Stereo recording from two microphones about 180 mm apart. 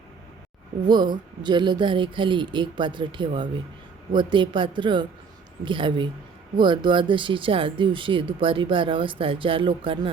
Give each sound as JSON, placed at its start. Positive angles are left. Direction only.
{"t": 0.9, "sound": "speech", "side_deg": -25}